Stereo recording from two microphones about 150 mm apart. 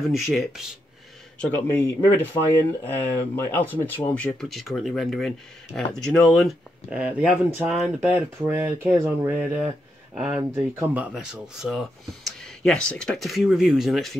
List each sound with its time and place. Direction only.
0.1 s speech: centre (ahead or behind)
1.4 s a man's voice: 10° left (ahead or behind)